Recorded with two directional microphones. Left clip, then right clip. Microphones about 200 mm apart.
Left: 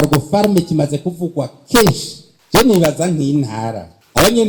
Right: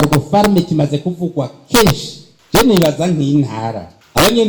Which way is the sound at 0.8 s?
40° left (ahead or behind).